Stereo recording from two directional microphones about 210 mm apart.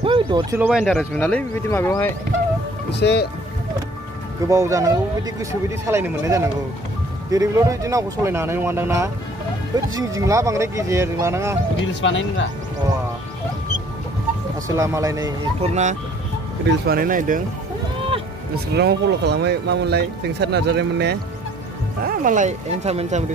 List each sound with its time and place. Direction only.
0.0 s bird: 25° right (ahead or behind)
0.6 s speech: 5° right (ahead or behind)
2.9 s speech: 55° left (ahead or behind)
4.5 s speech: 15° right (ahead or behind)
11.9 s speech: 60° left (ahead or behind)
14.8 s speech: 15° right (ahead or behind)
15.7 s speech: 35° right (ahead or behind)
16.6 s speech: 45° right (ahead or behind)
18.8 s speech: 50° right (ahead or behind)
22.0 s speech: 40° right (ahead or behind)